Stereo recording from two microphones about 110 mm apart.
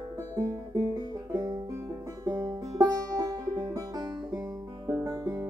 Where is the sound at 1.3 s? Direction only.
35° right (ahead or behind).